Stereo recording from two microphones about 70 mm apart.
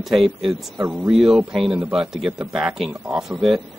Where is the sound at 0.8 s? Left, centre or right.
Right.